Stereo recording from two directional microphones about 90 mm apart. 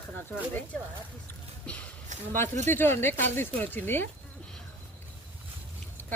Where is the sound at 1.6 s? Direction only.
10° left (ahead or behind).